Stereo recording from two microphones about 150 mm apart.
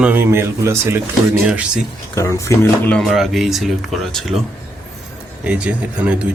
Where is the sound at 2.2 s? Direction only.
20° left (ahead or behind).